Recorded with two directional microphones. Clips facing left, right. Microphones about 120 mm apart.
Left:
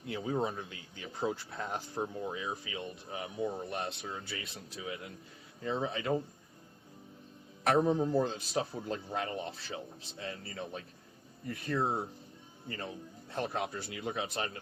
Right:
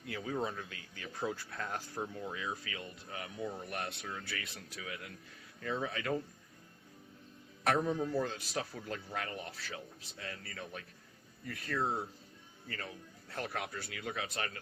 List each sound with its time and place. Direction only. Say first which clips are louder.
0.0 s speech: left 4 dB; 25° left (ahead or behind)
7.6 s speech: left 4 dB; 25° left (ahead or behind)